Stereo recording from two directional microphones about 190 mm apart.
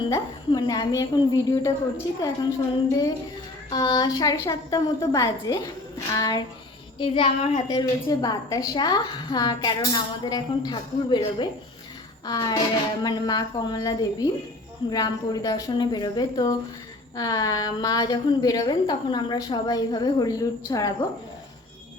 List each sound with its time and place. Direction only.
0.1 s a woman's voice: 20° left (ahead or behind)